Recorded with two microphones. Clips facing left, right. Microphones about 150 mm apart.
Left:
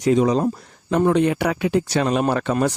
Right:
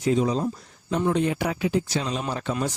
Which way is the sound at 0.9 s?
70° left (ahead or behind).